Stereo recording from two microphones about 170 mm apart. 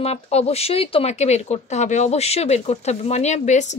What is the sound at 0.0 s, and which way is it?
Speech, 40° left (ahead or behind).